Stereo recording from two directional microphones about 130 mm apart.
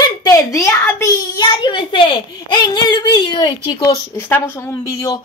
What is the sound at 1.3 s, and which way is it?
A child's voice, 35° left (ahead or behind).